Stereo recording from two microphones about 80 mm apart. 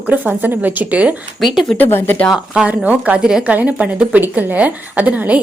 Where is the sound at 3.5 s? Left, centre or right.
Centre.